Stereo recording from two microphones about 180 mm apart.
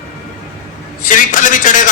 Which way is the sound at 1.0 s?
45° left (ahead or behind).